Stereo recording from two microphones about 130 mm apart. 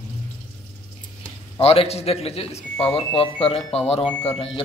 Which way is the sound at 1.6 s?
50° left (ahead or behind).